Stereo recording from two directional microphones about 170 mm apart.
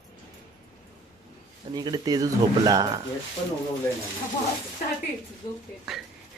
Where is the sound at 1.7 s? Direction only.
25° right (ahead or behind).